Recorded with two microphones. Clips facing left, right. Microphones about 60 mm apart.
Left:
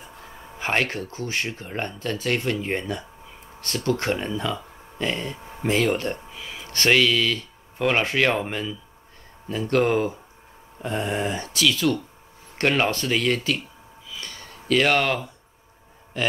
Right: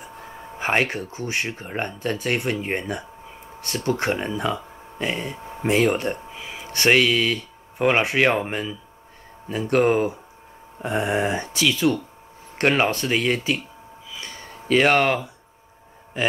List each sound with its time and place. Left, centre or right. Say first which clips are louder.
0.0 s speech: right 4 dB; centre
14.1 s a sound: right 1 dB; right
16.1 s speech: right 2 dB; centre